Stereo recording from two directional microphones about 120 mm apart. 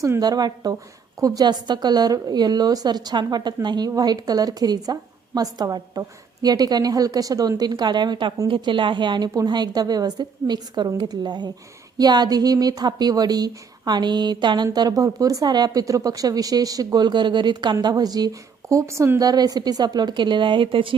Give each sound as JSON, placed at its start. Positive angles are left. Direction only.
{"t": 0.0, "sound": "a woman's voice", "side_deg": -30}
{"t": 19.2, "sound": "a woman's voice", "side_deg": -35}